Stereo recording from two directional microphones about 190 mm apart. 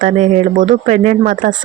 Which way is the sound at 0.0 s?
45° right (ahead or behind).